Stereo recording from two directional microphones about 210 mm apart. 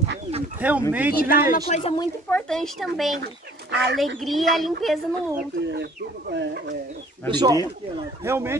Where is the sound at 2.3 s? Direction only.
Centre (ahead or behind).